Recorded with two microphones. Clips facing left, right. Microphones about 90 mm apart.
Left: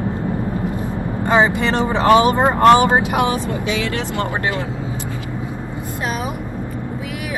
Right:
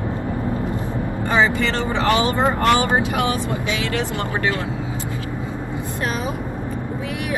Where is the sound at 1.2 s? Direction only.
20° left (ahead or behind).